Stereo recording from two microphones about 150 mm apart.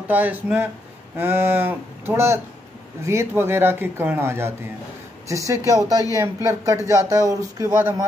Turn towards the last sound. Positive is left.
turn(degrees=-20)  # may be behind; listen again after turning